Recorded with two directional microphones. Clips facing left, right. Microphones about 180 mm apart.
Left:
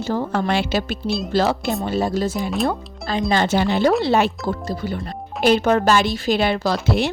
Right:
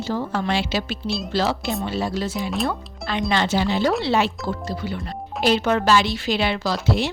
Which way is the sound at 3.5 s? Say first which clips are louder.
Left 5 dB; 55° left (ahead or behind).